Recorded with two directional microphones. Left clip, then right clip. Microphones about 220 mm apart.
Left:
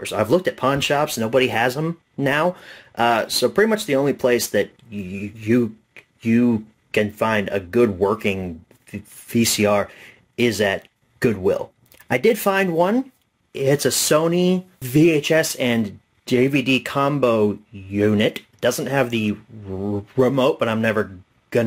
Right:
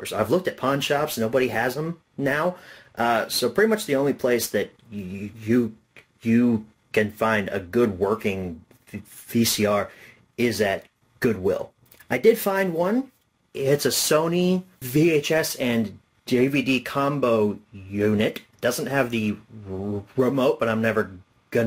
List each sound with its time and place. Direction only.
0.0 s speech: 35° left (ahead or behind)